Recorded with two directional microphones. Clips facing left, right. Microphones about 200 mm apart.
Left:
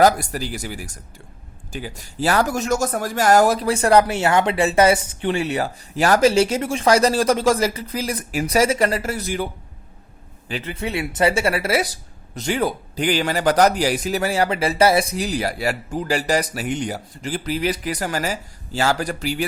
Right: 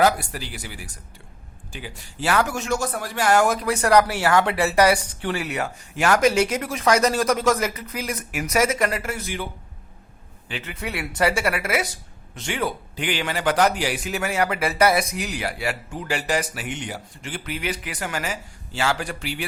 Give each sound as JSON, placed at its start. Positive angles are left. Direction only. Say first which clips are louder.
{"t": 0.0, "sound": "speech", "louder": "left 4 dB", "side_deg": 40}
{"t": 10.5, "sound": "speech", "louder": "left 5 dB", "side_deg": 35}